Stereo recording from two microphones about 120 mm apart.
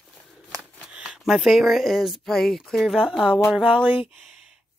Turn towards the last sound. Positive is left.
turn(degrees=-10)  # may be behind; listen again after turning